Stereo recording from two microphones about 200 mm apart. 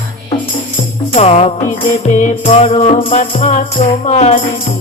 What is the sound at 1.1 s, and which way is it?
Music, 30° left (ahead or behind).